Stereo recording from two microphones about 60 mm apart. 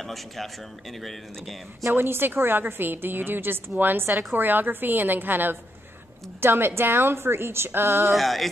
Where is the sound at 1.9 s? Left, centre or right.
Right.